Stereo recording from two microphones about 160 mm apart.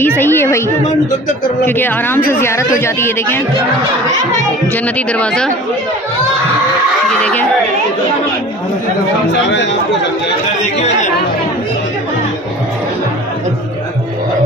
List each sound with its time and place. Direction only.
0.0 s a woman's voice: 15° left (ahead or behind)
1.7 s a woman's voice: 10° left (ahead or behind)
4.9 s a woman's voice: 10° left (ahead or behind)
7.2 s a woman's voice: 10° left (ahead or behind)
9.3 s speech: 90° left